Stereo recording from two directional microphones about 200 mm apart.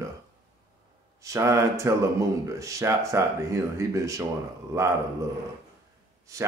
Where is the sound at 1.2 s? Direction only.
15° right (ahead or behind).